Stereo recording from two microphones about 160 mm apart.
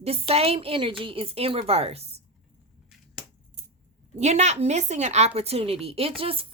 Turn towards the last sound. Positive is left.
turn(degrees=-35)  # may be behind; listen again after turning